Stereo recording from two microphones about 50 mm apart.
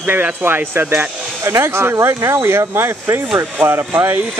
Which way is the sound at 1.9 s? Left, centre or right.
Right.